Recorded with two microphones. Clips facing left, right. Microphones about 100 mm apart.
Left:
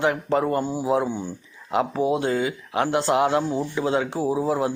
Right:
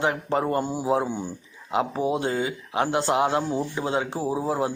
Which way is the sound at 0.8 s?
25° right (ahead or behind).